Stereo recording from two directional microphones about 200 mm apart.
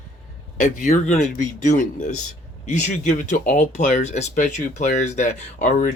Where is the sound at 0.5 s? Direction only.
40° left (ahead or behind).